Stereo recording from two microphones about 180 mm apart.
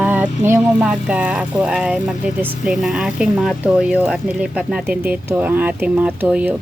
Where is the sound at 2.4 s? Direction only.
5° right (ahead or behind).